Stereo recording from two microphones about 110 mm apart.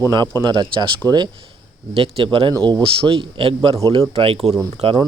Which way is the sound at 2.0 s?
55° right (ahead or behind).